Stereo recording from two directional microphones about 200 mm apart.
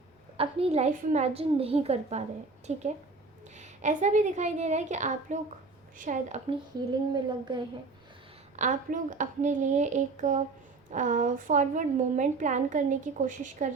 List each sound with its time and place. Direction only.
0.3 s a woman's voice: 30° right (ahead or behind)
7.1 s a woman's voice: 20° right (ahead or behind)
8.5 s a woman's voice: 40° right (ahead or behind)